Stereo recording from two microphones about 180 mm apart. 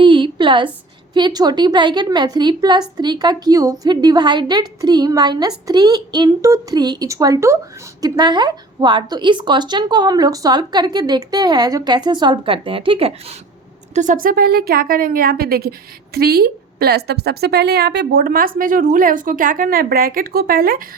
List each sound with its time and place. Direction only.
0.0 s a sound: 25° right (ahead or behind)
1.1 s speech: 25° right (ahead or behind)
13.9 s a woman's voice: 45° right (ahead or behind)